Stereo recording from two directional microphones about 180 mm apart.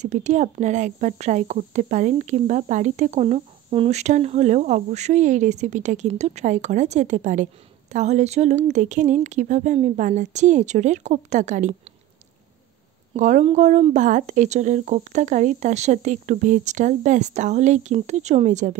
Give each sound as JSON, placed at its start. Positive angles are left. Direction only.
{"t": 0.0, "sound": "speech", "side_deg": -40}
{"t": 13.1, "sound": "speech", "side_deg": -40}